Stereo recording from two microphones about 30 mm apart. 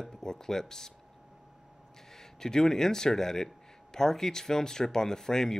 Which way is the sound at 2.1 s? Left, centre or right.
Centre.